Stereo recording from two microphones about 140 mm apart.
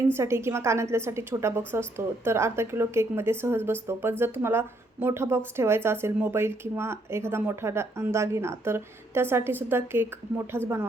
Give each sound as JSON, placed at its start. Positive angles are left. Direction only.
{"t": 0.1, "sound": "a woman's voice", "side_deg": -20}